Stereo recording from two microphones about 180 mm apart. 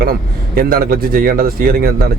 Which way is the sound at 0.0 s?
55° right (ahead or behind).